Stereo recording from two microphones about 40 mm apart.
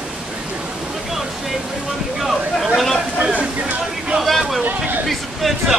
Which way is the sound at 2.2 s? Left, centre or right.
Centre.